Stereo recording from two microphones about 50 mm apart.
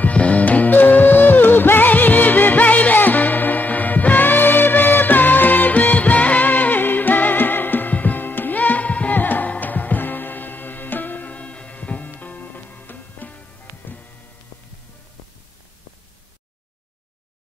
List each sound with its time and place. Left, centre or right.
0.0 s music: left